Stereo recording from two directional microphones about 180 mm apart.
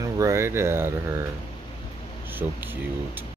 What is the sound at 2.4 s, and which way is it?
Speech, 15° right (ahead or behind).